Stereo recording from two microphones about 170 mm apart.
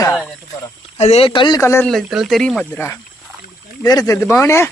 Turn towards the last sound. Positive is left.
turn(degrees=15)  # may be behind; listen again after turning